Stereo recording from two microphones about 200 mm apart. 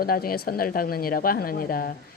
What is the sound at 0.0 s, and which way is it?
Speech, 50° left (ahead or behind).